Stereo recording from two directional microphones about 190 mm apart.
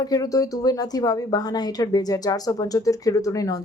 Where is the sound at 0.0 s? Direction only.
20° left (ahead or behind).